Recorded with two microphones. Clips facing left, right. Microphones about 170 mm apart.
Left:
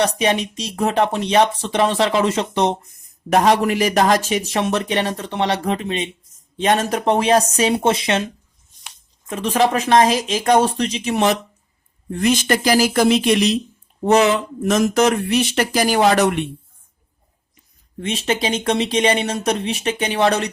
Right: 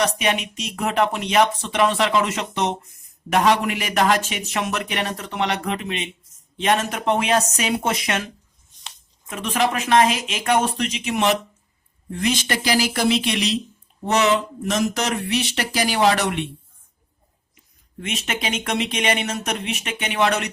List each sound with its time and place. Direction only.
0.0 s speech: 35° left (ahead or behind)
9.3 s speech: 35° left (ahead or behind)
12.2 s speech: 50° left (ahead or behind)
14.6 s speech: 50° left (ahead or behind)
18.0 s speech: 30° left (ahead or behind)